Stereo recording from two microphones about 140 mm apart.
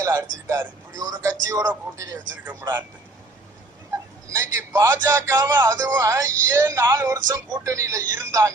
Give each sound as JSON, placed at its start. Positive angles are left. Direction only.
{"t": 0.0, "sound": "a man's voice", "side_deg": -20}
{"t": 2.4, "sound": "speech", "side_deg": -15}
{"t": 4.4, "sound": "a man's voice", "side_deg": -20}